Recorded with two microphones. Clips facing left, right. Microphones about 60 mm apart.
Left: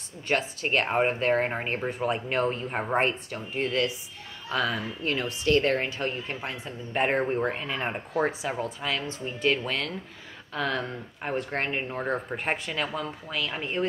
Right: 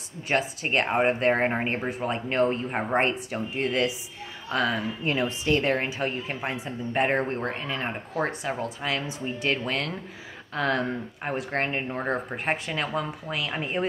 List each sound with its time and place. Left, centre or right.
0.3 s a woman's voice: centre
1.6 s a woman's voice: centre
2.0 s speech: centre
2.4 s a woman's voice: centre
5.0 s a woman's voice: centre
6.9 s a woman's voice: centre